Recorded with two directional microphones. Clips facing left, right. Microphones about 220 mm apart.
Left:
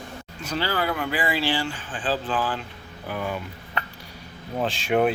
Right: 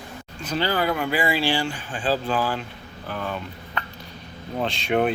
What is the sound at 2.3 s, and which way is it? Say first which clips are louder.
Speech: right 2 dB; 40° right (ahead or behind).